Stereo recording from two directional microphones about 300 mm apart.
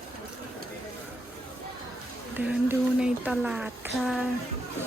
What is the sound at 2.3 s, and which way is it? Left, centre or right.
Speech, centre.